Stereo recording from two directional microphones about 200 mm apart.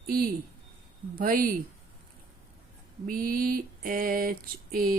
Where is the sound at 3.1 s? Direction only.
45° right (ahead or behind).